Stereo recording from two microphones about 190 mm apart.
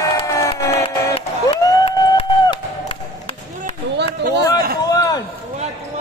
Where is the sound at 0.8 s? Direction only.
30° left (ahead or behind).